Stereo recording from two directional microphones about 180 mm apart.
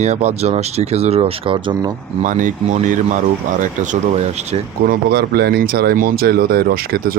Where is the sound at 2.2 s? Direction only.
45° right (ahead or behind).